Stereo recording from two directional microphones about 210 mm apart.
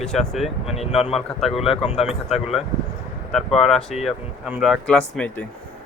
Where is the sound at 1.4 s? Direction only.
Centre (ahead or behind).